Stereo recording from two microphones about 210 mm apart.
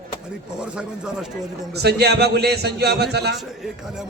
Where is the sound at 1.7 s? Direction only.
50° right (ahead or behind).